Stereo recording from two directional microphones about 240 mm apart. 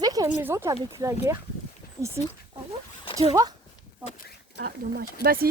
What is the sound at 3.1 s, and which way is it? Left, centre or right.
Speech, centre.